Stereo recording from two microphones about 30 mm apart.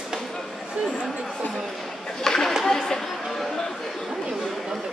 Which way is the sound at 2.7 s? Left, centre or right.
Centre.